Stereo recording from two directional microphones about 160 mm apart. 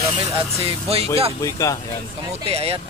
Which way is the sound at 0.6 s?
40° right (ahead or behind).